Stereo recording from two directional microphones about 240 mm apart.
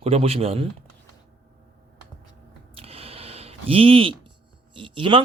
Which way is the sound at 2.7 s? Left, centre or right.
Right.